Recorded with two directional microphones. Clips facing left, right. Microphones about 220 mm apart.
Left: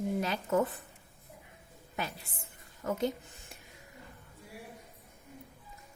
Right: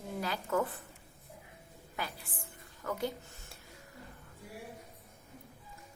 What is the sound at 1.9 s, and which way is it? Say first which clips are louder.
A woman's voice: left 3 dB; 25° left (ahead or behind).